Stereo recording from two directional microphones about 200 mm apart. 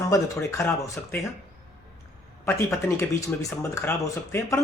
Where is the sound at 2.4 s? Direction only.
15° left (ahead or behind).